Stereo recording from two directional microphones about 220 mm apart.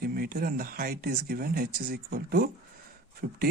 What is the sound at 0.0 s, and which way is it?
A man's voice, 45° right (ahead or behind).